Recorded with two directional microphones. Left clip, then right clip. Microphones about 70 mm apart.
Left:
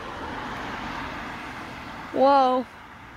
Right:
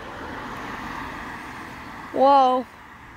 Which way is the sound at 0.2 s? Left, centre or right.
Right.